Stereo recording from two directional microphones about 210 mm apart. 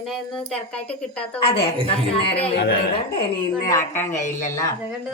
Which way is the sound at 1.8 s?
25° left (ahead or behind).